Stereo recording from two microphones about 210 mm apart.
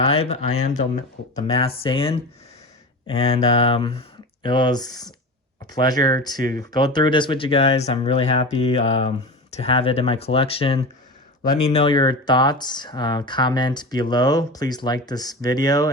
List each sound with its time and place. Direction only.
0.0 s speech: 30° left (ahead or behind)